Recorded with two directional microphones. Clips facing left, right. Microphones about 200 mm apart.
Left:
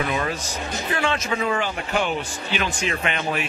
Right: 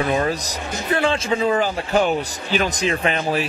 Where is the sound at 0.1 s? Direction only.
35° right (ahead or behind).